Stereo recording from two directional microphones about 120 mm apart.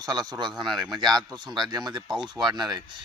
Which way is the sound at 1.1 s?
35° right (ahead or behind).